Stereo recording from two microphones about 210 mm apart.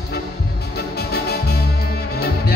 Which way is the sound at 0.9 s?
50° left (ahead or behind).